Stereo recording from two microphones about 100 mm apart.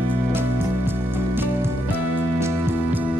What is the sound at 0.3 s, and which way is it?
Music, 25° right (ahead or behind).